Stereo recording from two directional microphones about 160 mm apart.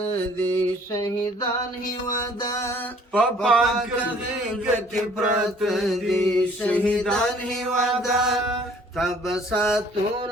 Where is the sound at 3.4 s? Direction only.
Centre (ahead or behind).